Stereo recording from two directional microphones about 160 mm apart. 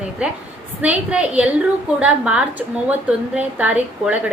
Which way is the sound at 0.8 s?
10° right (ahead or behind).